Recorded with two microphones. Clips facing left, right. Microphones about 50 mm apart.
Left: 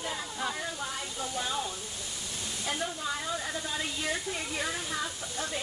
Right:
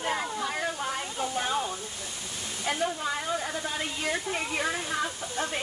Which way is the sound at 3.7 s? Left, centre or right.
Right.